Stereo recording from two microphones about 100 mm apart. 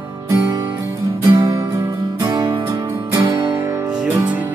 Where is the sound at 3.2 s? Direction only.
50° right (ahead or behind).